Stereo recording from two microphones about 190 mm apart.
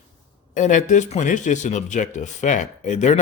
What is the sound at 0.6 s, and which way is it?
Speech, 40° left (ahead or behind).